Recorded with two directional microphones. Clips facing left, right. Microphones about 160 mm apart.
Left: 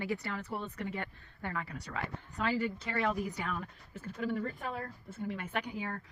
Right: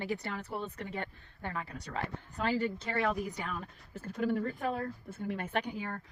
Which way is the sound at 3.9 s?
45° right (ahead or behind).